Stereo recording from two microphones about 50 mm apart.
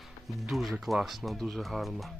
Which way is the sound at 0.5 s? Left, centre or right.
Centre.